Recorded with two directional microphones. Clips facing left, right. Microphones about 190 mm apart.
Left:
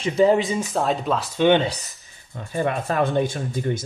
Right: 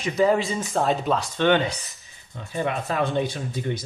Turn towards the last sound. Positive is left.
turn(degrees=50)  # may be behind; listen again after turning